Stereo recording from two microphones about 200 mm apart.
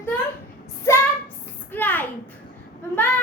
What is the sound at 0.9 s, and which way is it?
Child singing, 15° left (ahead or behind).